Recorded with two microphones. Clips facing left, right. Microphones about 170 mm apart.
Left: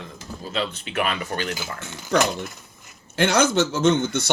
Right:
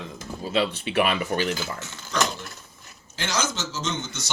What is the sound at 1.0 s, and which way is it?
Speech, 10° right (ahead or behind).